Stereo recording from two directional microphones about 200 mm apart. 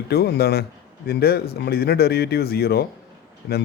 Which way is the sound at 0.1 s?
50° left (ahead or behind).